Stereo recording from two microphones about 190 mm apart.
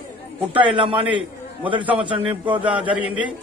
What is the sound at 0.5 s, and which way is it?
A man's voice, 25° right (ahead or behind).